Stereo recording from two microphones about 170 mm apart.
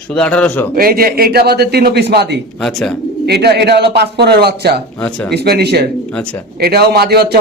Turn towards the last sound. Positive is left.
turn(degrees=-70)  # may be behind; listen again after turning